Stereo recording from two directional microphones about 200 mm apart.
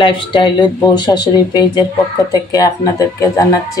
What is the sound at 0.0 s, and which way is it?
Speech, 25° left (ahead or behind).